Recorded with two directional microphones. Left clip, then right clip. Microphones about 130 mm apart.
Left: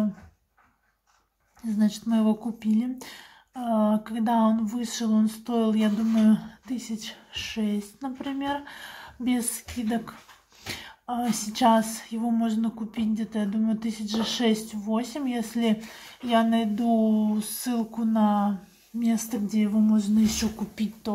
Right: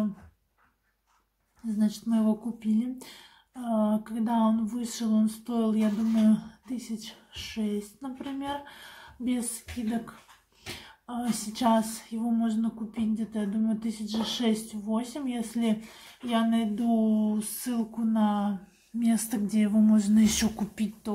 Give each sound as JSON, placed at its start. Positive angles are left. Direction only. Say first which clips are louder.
{"t": 1.8, "sound": "speech", "louder": "left 3 dB", "side_deg": 20}
{"t": 18.9, "sound": "a woman's voice", "louder": "left 1 dB", "side_deg": -5}
{"t": 19.9, "sound": "speech", "louder": "even", "side_deg": -30}